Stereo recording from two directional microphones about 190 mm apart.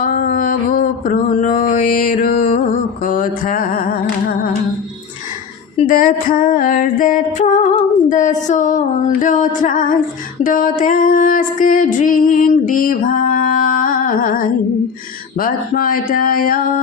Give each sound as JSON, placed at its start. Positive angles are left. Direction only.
{"t": 0.0, "sound": "mantra", "side_deg": 45}
{"t": 3.0, "sound": "music", "side_deg": 45}
{"t": 5.7, "sound": "music", "side_deg": 45}